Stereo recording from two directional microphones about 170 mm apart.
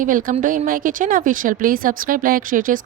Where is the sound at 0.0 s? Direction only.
55° right (ahead or behind).